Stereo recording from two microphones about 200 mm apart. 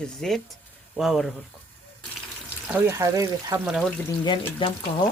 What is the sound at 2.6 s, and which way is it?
Speech, 10° right (ahead or behind).